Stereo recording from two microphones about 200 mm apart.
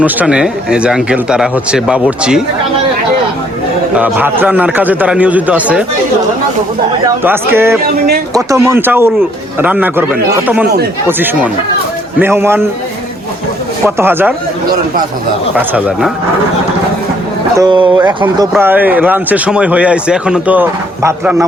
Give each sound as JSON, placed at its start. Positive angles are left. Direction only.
{"t": 0.0, "sound": "speech", "side_deg": -5}
{"t": 3.9, "sound": "a man's voice", "side_deg": -10}
{"t": 7.3, "sound": "a man's voice", "side_deg": -10}
{"t": 12.2, "sound": "a man's voice", "side_deg": -10}
{"t": 13.8, "sound": "a man's voice", "side_deg": -10}
{"t": 17.6, "sound": "speech", "side_deg": -25}
{"t": 18.6, "sound": "a man's voice", "side_deg": -10}